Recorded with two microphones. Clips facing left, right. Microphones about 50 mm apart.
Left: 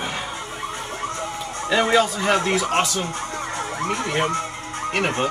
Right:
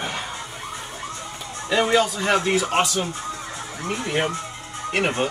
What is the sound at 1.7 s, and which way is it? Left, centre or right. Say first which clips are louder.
Speech: left 1 dB; centre.